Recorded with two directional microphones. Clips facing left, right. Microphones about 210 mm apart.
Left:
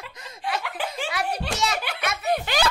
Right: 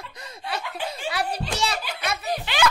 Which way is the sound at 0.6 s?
85° left.